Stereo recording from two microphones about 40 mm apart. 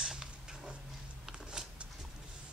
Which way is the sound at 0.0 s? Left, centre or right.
Centre.